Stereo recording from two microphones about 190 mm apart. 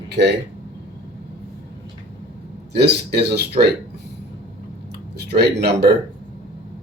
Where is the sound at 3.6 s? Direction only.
40° right (ahead or behind).